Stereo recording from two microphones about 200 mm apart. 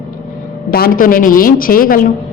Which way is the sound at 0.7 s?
45° left (ahead or behind).